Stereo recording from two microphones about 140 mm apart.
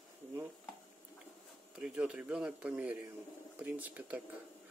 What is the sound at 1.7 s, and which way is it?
Speech, 5° right (ahead or behind).